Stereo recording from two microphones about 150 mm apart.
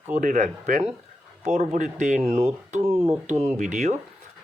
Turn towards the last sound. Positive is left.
turn(degrees=-55)  # may be behind; listen again after turning